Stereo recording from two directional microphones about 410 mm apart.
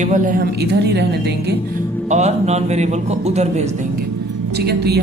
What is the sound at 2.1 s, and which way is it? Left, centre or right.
A man's voice, centre.